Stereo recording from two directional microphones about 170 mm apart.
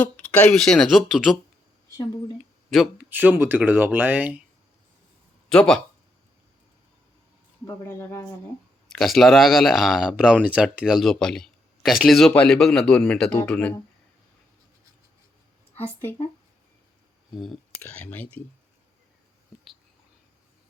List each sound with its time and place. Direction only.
0.0 s speech: 5° left (ahead or behind)
2.6 s speech: centre (ahead or behind)
5.5 s speech: 5° left (ahead or behind)
7.7 s speech: 15° left (ahead or behind)
8.9 s speech: centre (ahead or behind)
15.7 s speech: 15° left (ahead or behind)
17.3 s speech: centre (ahead or behind)